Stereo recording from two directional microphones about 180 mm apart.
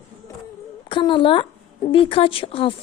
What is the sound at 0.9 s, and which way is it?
A woman's voice, 25° left (ahead or behind).